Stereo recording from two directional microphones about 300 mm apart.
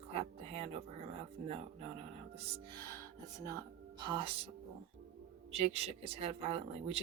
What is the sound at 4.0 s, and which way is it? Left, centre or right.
Speech, centre.